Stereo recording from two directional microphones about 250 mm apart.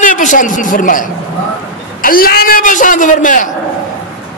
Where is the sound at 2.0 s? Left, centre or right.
Left.